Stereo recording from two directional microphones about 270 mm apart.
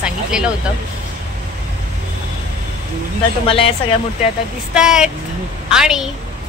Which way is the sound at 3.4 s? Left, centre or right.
Left.